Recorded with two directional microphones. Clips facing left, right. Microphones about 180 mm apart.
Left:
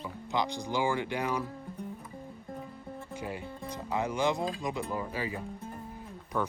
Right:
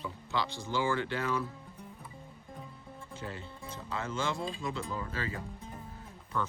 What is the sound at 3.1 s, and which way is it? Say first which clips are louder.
Music: left 3 dB; 15° left (ahead or behind).